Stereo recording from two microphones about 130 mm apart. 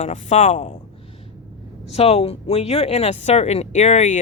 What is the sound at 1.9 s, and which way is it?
Speech, 55° left (ahead or behind).